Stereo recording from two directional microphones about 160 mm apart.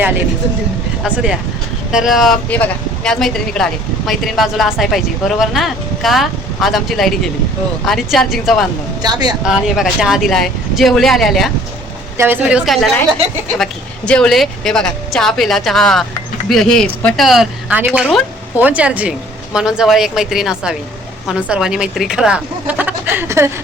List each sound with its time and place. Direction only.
1.0 s speech: 5° right (ahead or behind)
9.0 s a woman's voice: 25° right (ahead or behind)
9.4 s speech: centre (ahead or behind)
12.1 s a woman's voice: 15° right (ahead or behind)